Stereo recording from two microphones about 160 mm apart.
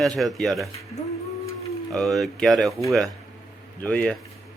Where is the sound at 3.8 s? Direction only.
5° left (ahead or behind).